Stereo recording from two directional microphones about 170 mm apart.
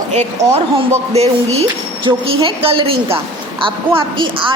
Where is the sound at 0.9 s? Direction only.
40° right (ahead or behind).